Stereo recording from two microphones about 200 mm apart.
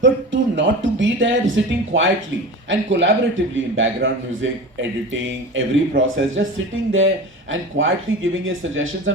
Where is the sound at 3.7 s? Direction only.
75° right (ahead or behind).